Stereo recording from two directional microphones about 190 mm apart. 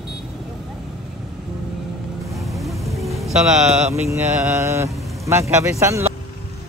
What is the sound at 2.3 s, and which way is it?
Vehicle, centre (ahead or behind).